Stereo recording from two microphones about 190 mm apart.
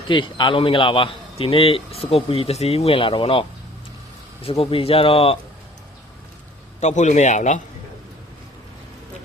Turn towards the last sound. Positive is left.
turn(degrees=40)  # may be behind; listen again after turning